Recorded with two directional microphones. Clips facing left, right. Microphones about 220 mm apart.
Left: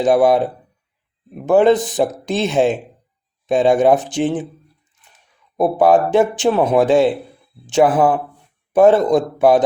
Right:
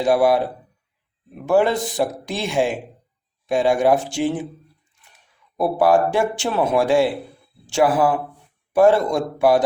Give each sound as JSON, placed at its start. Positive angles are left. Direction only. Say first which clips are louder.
{"t": 0.0, "sound": "speech", "louder": "left 3 dB", "side_deg": 20}